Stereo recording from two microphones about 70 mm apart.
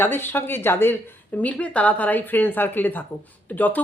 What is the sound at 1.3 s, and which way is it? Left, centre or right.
A woman's voice, left.